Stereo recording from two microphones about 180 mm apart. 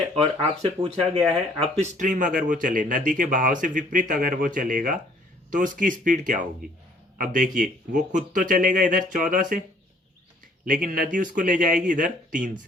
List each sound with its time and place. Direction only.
0.2 s speech: 30° right (ahead or behind)
10.7 s speech: 50° right (ahead or behind)